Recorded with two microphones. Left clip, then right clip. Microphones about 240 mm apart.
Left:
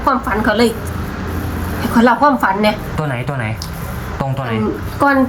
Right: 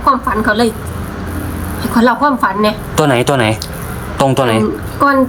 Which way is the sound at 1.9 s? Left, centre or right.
Centre.